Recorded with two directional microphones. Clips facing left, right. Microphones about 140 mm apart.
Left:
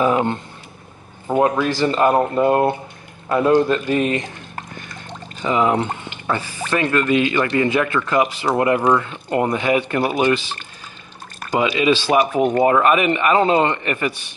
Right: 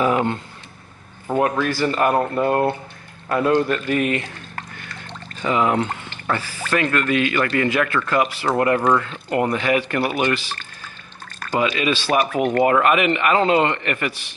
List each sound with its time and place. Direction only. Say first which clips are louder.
0.0 s a man's voice: left 2 dB; 20° left (ahead or behind)